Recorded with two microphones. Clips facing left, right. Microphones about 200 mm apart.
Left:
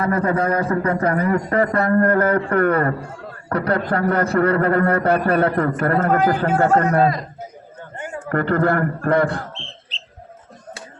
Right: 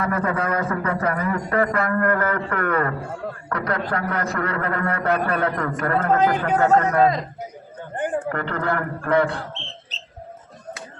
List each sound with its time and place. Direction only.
0.0 s a man's voice: 30° left (ahead or behind)
6.1 s speech: 20° right (ahead or behind)
6.7 s a man's voice: 35° left (ahead or behind)
7.9 s a sound: 55° right (ahead or behind)
8.3 s a man's voice: 40° left (ahead or behind)